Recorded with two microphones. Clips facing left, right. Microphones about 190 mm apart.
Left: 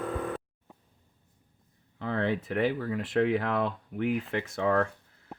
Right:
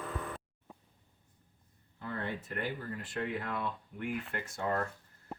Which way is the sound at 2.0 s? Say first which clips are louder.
Left 9 dB; 90° left.